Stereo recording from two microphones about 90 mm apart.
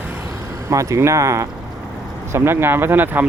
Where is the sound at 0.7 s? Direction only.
35° right (ahead or behind).